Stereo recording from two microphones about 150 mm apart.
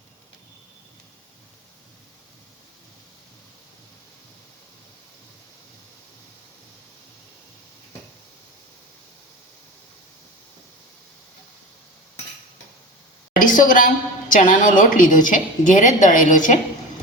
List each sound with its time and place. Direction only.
13.4 s a woman's voice: 60° left (ahead or behind)